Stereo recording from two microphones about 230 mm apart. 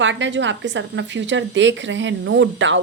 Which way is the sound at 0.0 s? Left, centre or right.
Right.